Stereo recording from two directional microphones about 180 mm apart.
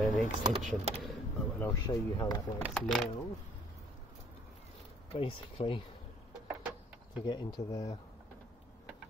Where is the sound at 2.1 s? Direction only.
20° left (ahead or behind).